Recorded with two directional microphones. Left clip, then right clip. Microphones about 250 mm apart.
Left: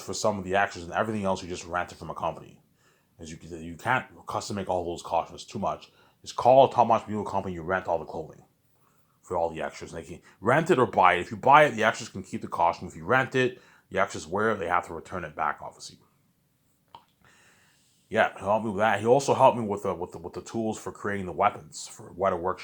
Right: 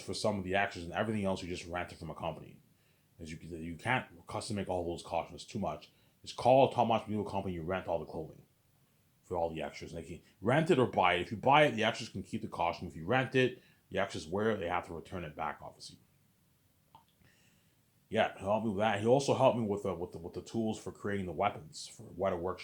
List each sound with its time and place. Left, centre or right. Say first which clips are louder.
0.0 s speech: left 7 dB; centre
16.9 s a sound: left 11 dB; left
18.1 s speech: left 7 dB; centre